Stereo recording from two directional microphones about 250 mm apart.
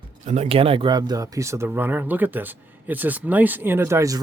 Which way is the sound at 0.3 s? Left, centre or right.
Right.